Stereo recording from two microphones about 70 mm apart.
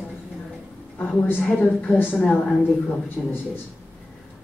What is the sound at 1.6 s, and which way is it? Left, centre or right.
Speech, left.